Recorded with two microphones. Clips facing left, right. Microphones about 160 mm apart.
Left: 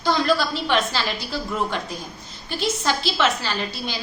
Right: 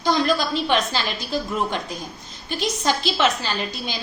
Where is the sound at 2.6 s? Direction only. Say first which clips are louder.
Even; 20° right (ahead or behind).